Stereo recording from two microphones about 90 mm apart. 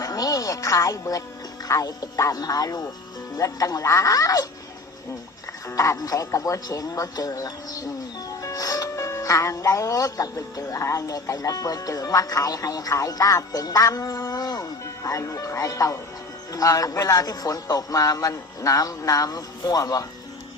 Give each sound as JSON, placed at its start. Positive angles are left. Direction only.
{"t": 0.0, "sound": "speech", "side_deg": 40}
{"t": 5.6, "sound": "speech", "side_deg": 35}